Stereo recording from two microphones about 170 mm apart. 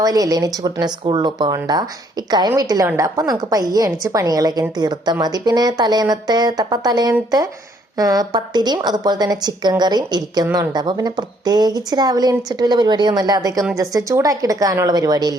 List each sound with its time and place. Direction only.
0.0 s a woman's voice: 20° right (ahead or behind)